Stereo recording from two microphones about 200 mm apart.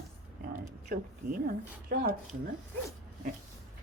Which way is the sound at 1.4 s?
45° right (ahead or behind).